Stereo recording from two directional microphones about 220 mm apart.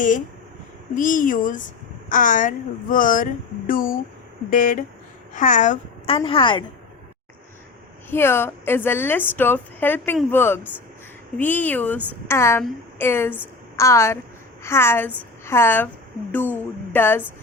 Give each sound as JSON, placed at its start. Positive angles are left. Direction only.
{"t": 0.9, "sound": "a woman's voice", "side_deg": 35}
{"t": 8.1, "sound": "a woman's voice", "side_deg": 10}